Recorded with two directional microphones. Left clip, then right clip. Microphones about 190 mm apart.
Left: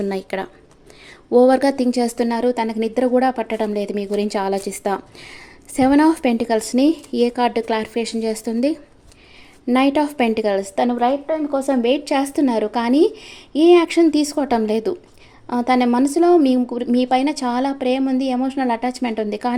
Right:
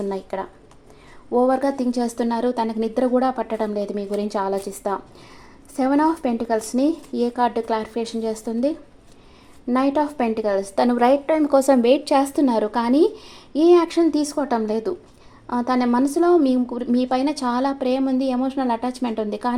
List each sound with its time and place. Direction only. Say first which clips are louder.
0.0 s a woman's voice: left 3 dB; 25° left (ahead or behind)
11.3 s speech: right 3 dB; 20° right (ahead or behind); by 19.5 s 15° left (ahead or behind)